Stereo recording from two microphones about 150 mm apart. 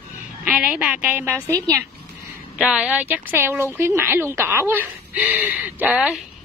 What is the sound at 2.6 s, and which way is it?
Speech, 5° right (ahead or behind).